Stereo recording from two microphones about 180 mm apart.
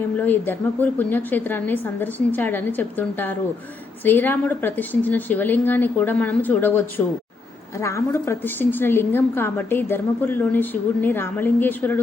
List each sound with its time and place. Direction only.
0.2 s a woman's voice: 10° left (ahead or behind)